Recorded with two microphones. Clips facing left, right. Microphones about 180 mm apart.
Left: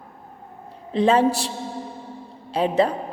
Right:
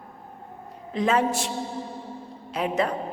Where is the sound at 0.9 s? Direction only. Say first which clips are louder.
Left 5 dB; 30° left (ahead or behind).